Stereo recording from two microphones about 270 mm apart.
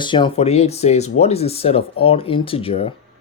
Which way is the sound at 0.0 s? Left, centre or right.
Centre.